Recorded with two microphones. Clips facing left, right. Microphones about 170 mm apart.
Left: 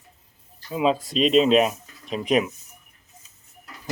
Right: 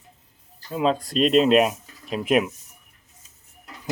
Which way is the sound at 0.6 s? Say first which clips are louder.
Even; 5° left (ahead or behind).